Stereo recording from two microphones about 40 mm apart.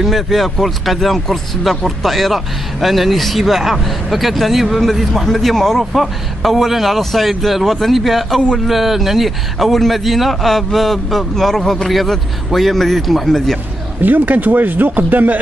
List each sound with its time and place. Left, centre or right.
0.0 s a man's voice: centre
14.0 s speech: right